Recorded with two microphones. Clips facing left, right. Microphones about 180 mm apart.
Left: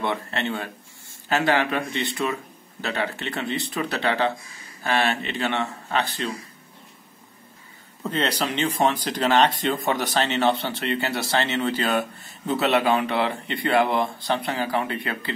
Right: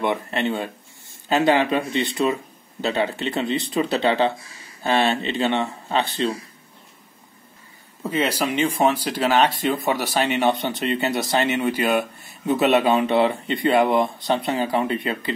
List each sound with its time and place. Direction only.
0.0 s speech: 15° right (ahead or behind)
8.0 s speech: 10° right (ahead or behind)